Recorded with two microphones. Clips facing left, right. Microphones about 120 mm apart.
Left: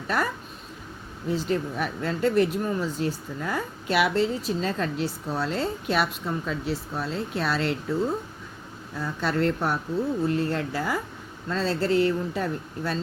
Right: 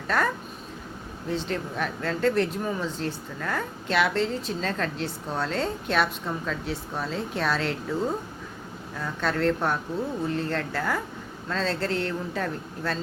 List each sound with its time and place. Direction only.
1.3 s speech: 5° left (ahead or behind)
9.0 s speech: 5° left (ahead or behind)